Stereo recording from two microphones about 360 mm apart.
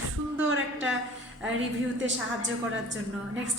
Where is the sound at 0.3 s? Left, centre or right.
Right.